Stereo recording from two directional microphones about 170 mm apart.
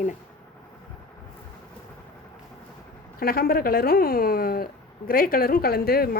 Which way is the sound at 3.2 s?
60° left (ahead or behind).